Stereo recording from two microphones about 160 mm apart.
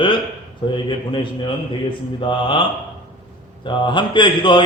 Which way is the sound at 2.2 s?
30° left (ahead or behind).